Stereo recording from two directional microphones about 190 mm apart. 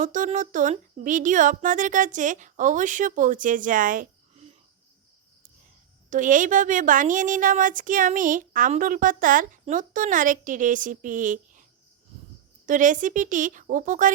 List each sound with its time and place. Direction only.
0.0 s a woman's voice: 40° right (ahead or behind)
6.1 s a woman's voice: 40° right (ahead or behind)
12.6 s a woman's voice: 40° right (ahead or behind)